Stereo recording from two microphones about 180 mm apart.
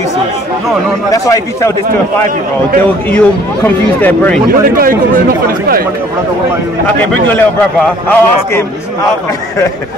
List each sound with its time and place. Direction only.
1.1 s a man's voice: 20° left (ahead or behind)
2.8 s speech: 10° left (ahead or behind)
4.5 s speech: 55° right (ahead or behind)
7.8 s speech: 5° left (ahead or behind)